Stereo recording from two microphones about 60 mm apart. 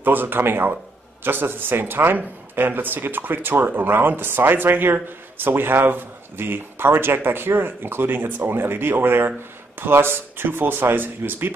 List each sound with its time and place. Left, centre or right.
0.0 s speech: right